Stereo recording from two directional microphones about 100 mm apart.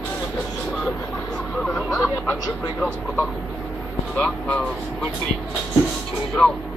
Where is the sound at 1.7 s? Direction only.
5° left (ahead or behind).